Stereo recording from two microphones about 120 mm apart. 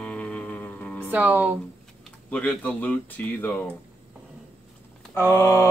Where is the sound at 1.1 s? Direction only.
15° right (ahead or behind).